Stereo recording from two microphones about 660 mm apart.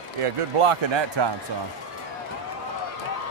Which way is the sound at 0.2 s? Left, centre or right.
Right.